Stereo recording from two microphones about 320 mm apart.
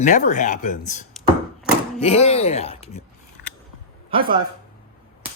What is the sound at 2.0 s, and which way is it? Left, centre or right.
Speech, centre.